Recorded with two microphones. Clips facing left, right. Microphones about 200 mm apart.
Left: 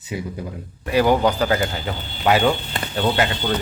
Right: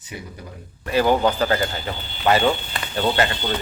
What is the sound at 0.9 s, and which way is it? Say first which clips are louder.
A man's voice: left 1 dB; 10° left (ahead or behind).